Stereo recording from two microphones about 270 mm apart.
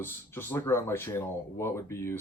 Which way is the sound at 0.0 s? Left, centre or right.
Centre.